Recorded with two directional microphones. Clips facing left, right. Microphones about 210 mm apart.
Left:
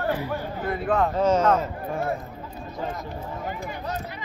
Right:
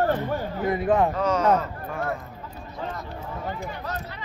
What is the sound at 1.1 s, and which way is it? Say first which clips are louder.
Speech: left 3 dB; 25° left (ahead or behind).